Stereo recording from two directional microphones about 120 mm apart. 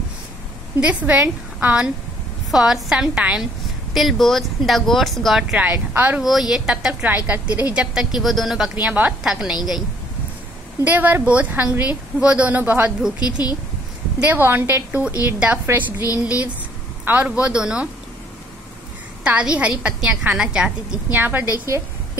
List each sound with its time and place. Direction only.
0.7 s a woman's voice: 15° right (ahead or behind)
5.6 s a woman's voice: 15° right (ahead or behind)
10.8 s a woman's voice: 15° right (ahead or behind)
13.2 s speech: 35° left (ahead or behind)
14.2 s a woman's voice: 15° right (ahead or behind)
19.2 s a woman's voice: 10° right (ahead or behind)